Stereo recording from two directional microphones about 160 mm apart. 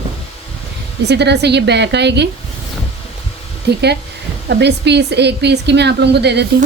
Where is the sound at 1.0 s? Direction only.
90° right.